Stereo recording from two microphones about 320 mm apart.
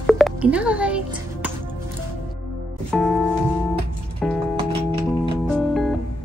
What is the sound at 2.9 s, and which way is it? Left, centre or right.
Music, centre.